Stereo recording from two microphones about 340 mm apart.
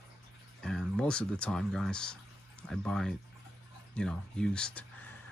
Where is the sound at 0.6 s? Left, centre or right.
Centre.